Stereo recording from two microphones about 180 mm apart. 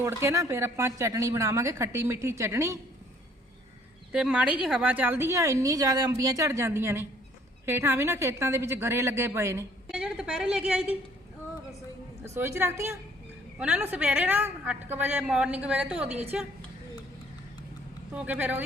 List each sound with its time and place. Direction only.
0.0 s a woman's voice: 15° right (ahead or behind)
4.1 s a woman's voice: 5° right (ahead or behind)
12.2 s a woman's voice: 15° right (ahead or behind)
18.1 s a woman's voice: 5° right (ahead or behind)